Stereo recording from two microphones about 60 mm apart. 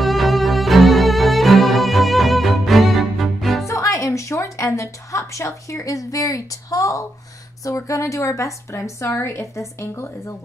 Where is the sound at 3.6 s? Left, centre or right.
Left.